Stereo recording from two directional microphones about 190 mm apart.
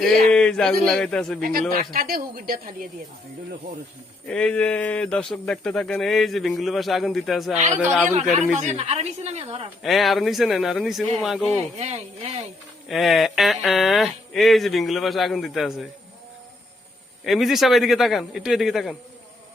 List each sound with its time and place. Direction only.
0.0 s speech: 5° left (ahead or behind)
1.4 s a woman's voice: 50° right (ahead or behind)
4.3 s speech: 5° left (ahead or behind)
8.5 s a woman's voice: 35° right (ahead or behind)
9.8 s speech: centre (ahead or behind)
11.8 s a woman's voice: 35° right (ahead or behind)
12.9 s speech: centre (ahead or behind)
17.2 s speech: centre (ahead or behind)